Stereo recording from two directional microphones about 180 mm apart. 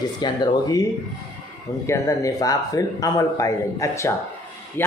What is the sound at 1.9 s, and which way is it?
Speech, 20° left (ahead or behind).